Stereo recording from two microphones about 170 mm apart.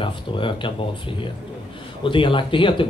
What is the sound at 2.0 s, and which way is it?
Speech, 30° left (ahead or behind).